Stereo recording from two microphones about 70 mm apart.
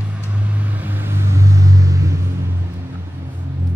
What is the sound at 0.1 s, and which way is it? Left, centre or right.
Vehicle, right.